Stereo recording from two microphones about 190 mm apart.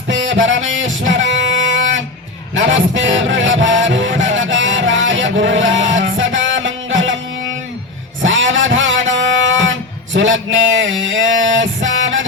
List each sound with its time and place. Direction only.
0.1 s a sound: 80° right
2.6 s music: 80° right
8.2 s music: 85° right